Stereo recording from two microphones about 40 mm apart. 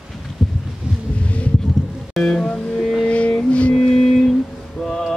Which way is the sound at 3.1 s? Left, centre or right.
Left.